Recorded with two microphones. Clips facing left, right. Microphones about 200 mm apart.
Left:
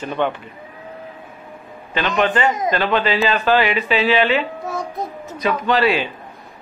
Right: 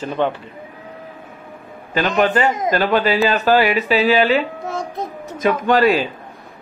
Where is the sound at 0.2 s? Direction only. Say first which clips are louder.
Right 1 dB; 35° right (ahead or behind).